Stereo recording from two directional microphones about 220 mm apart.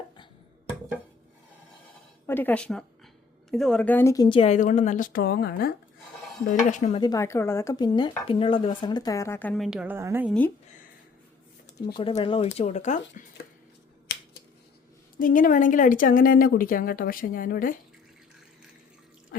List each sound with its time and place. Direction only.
2.2 s a woman's voice: 10° left (ahead or behind); by 5.7 s 45° left (ahead or behind)
6.7 s a woman's voice: 35° left (ahead or behind)
7.0 s speech: 15° left (ahead or behind)
9.6 s a woman's voice: 5° right (ahead or behind)
11.9 s speech: 25° left (ahead or behind)
15.2 s a woman's voice: 35° left (ahead or behind)